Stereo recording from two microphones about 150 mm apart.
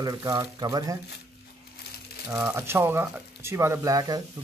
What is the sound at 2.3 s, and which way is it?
Speech, 15° right (ahead or behind).